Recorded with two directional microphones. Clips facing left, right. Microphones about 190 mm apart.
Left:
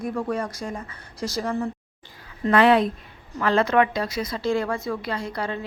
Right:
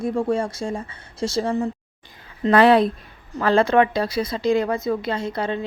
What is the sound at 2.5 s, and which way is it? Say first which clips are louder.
Speech: right 3 dB; 35° right (ahead or behind).